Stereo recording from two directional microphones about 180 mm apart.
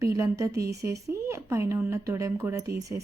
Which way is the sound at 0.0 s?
15° right (ahead or behind).